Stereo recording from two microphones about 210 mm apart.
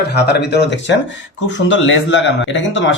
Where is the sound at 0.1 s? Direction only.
50° left (ahead or behind).